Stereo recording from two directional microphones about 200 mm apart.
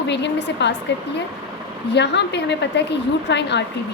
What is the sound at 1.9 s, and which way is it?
A woman's voice, 60° left (ahead or behind).